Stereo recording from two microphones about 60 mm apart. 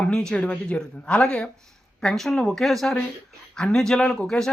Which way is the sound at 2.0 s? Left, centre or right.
Centre.